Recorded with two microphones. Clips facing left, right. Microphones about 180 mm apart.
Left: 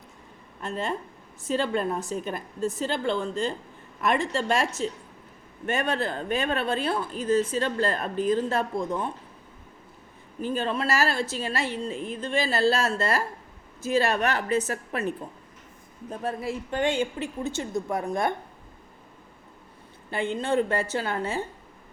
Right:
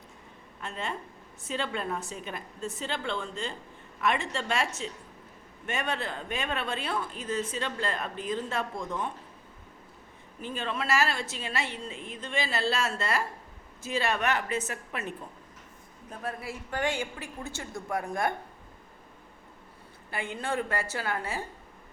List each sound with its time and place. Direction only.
0.6 s speech: 40° left (ahead or behind)
10.4 s a woman's voice: 35° left (ahead or behind); by 18.0 s 20° left (ahead or behind)
20.1 s a man's voice: 25° left (ahead or behind)